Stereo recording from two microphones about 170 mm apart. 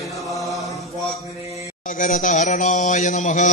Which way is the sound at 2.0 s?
50° left (ahead or behind).